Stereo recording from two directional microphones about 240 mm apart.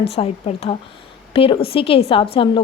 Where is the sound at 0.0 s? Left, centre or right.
Left.